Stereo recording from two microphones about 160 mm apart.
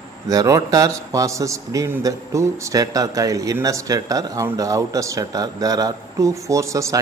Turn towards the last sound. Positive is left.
turn(degrees=-20)  # may be behind; listen again after turning